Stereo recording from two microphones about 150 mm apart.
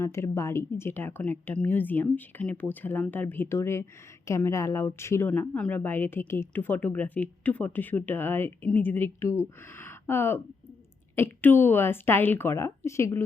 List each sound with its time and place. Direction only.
0.0 s a woman's voice: 20° left (ahead or behind)